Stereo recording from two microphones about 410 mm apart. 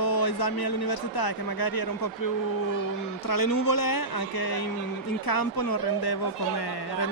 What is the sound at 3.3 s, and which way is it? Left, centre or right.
Speech, left.